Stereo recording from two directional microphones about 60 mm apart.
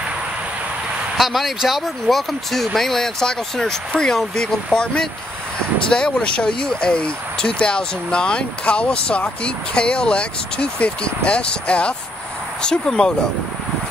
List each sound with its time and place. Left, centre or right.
1.1 s speech: centre
5.9 s speech: centre